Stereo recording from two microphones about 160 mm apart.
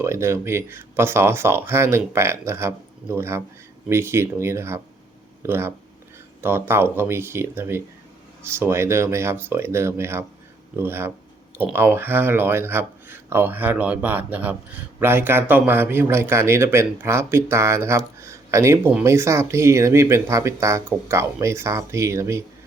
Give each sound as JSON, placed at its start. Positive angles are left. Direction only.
{"t": 0.0, "sound": "speech", "side_deg": -15}